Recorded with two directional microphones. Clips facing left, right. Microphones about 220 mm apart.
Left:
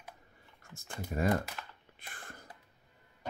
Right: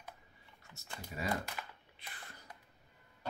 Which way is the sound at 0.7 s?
50° left (ahead or behind).